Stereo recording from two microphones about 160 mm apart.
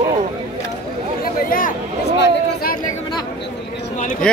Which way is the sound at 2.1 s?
80° left.